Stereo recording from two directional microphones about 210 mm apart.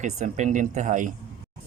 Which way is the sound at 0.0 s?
35° right (ahead or behind).